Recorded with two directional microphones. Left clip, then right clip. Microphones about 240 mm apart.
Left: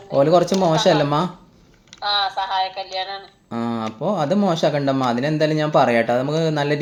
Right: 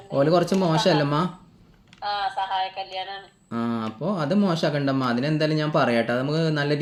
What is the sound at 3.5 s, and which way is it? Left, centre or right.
Speech, centre.